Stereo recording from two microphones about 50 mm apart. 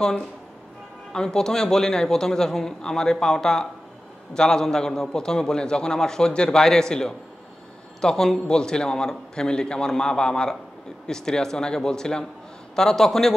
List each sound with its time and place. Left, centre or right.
1.1 s a man's voice: centre